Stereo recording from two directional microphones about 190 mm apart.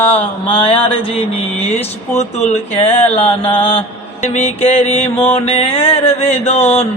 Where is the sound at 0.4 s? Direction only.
25° left (ahead or behind).